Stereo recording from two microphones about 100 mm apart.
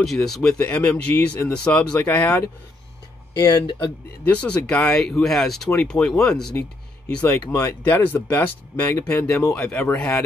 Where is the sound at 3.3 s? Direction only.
50° left (ahead or behind).